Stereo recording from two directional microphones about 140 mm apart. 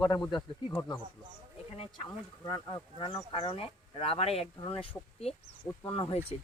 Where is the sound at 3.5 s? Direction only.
45° left (ahead or behind).